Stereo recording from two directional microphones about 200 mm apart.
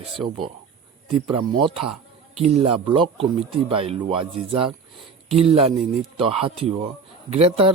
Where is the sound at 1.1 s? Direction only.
25° right (ahead or behind).